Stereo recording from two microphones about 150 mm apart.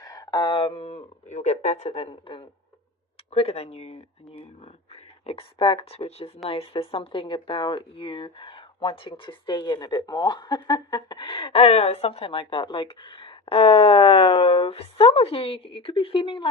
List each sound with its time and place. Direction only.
0.0 s speech: 25° left (ahead or behind)